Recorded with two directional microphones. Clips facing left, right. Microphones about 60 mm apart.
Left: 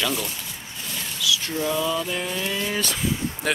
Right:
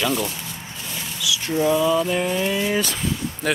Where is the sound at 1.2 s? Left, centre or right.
Centre.